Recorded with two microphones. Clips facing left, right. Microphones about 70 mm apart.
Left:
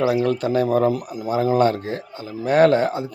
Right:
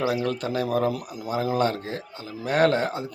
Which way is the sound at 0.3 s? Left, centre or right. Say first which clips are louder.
Left 6 dB; left.